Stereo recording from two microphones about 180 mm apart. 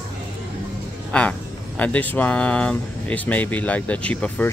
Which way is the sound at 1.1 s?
5° left (ahead or behind).